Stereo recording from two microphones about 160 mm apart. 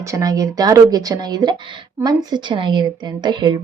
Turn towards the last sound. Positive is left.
turn(degrees=-25)  # may be behind; listen again after turning